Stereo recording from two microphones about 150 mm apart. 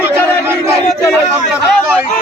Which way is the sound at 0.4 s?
15° right (ahead or behind).